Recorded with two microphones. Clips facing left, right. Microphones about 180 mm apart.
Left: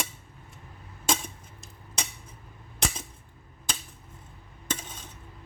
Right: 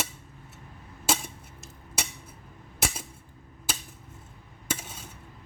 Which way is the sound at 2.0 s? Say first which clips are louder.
Right 1 dB; 5° right (ahead or behind).